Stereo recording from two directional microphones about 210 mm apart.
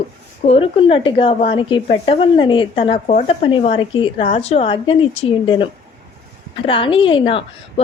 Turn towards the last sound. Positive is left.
turn(degrees=25)  # may be behind; listen again after turning